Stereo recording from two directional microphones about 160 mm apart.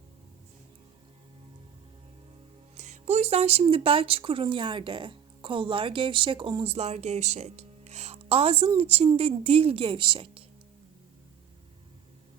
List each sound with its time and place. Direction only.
2.7 s speech: 45° right (ahead or behind)